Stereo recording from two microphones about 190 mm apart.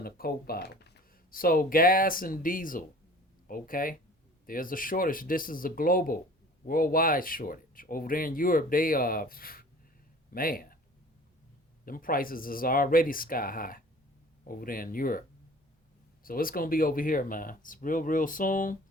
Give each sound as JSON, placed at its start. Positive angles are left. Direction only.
{"t": 0.0, "sound": "speech", "side_deg": 50}
{"t": 11.9, "sound": "speech", "side_deg": 50}
{"t": 16.2, "sound": "speech", "side_deg": 50}